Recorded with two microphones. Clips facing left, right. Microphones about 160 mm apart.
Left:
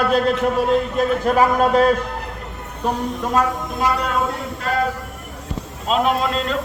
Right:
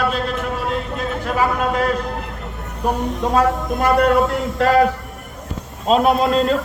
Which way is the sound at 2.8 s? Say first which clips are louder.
Right 1 dB; 10° right (ahead or behind).